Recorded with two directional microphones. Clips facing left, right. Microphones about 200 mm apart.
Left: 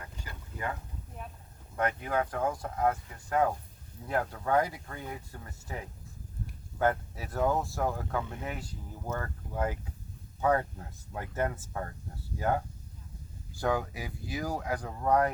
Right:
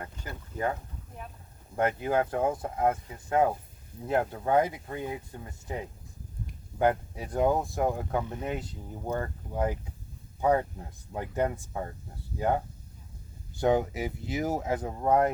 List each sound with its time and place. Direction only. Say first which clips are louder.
1.7 s speech: right 4 dB; 30° right (ahead or behind)
13.6 s speech: right 6 dB; 20° right (ahead or behind)